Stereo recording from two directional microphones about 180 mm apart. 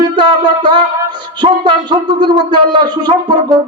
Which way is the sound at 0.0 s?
25° right (ahead or behind).